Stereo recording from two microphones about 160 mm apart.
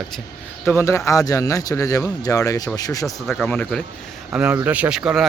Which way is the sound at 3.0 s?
5° left (ahead or behind).